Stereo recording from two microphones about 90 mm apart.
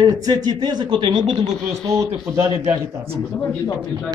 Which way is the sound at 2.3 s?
35° right (ahead or behind).